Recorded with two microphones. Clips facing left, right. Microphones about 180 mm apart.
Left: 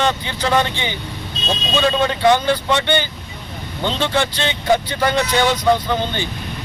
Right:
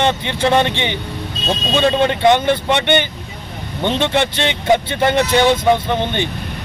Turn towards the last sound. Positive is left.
turn(degrees=-25)  # may be behind; listen again after turning